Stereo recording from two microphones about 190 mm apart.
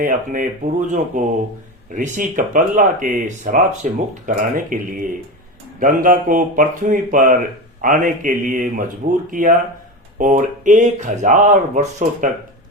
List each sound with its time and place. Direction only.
0.0 s speech: 45° right (ahead or behind)